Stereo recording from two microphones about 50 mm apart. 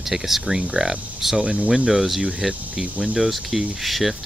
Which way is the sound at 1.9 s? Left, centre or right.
Centre.